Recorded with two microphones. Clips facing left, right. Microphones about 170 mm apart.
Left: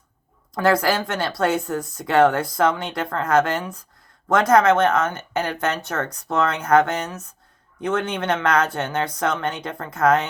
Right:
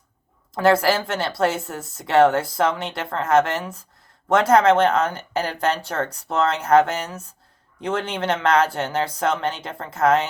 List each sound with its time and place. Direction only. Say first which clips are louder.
0.5 s speech: right 1 dB; 25° right (ahead or behind)